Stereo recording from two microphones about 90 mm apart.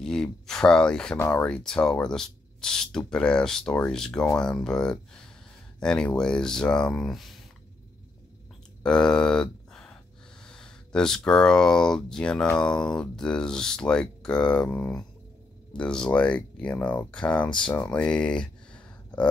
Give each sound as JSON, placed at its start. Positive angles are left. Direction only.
{"t": 0.0, "sound": "speech", "side_deg": 5}
{"t": 1.1, "sound": "speech", "side_deg": 25}
{"t": 1.4, "sound": "speech", "side_deg": 10}
{"t": 8.8, "sound": "speech", "side_deg": 10}